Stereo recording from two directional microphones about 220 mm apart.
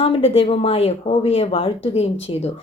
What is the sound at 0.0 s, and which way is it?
A woman's voice, 25° left (ahead or behind).